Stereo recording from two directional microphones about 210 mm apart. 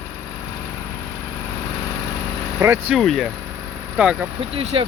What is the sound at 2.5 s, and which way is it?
Speech, 10° right (ahead or behind).